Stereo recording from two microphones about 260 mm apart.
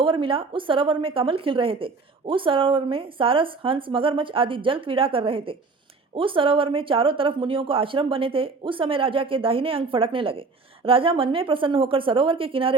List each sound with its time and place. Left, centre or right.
0.0 s a woman's voice: centre